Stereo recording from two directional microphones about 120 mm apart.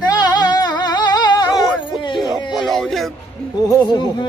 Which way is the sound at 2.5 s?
Centre (ahead or behind).